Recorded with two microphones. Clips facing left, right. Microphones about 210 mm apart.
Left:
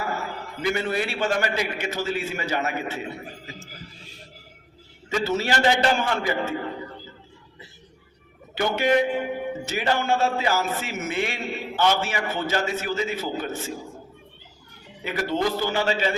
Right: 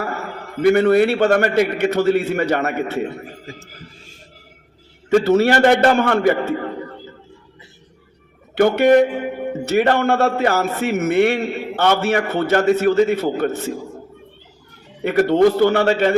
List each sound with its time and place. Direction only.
0.6 s a man's voice: 60° right (ahead or behind)
5.0 s a man's voice: 60° right (ahead or behind)
8.5 s a man's voice: 60° right (ahead or behind)
15.0 s a man's voice: 60° right (ahead or behind)